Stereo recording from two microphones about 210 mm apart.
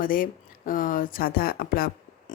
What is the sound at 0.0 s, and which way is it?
Speech, 40° left (ahead or behind).